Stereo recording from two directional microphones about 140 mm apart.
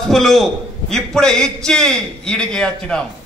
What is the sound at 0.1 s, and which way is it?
A man's voice, centre (ahead or behind).